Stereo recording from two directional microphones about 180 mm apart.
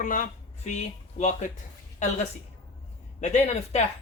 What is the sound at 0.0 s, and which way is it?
Speech, 45° left (ahead or behind).